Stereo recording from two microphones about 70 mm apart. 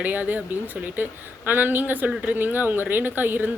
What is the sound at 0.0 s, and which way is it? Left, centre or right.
Speech, right.